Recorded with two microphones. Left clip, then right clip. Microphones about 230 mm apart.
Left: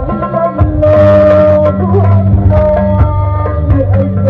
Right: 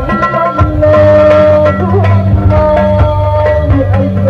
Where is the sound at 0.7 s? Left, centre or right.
Right.